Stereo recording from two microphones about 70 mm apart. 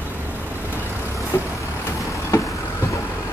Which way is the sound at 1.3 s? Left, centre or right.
Left.